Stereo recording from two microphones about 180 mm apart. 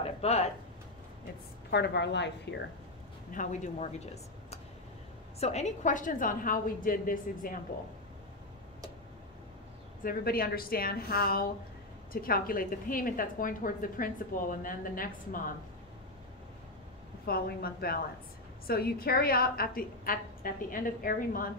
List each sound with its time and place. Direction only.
0.0 s a sound: 35° left (ahead or behind)
1.7 s a woman's voice: 70° left (ahead or behind)
3.3 s a woman's voice: 40° left (ahead or behind)
10.0 s a woman's voice: 55° left (ahead or behind)
17.3 s a woman's voice: 55° left (ahead or behind)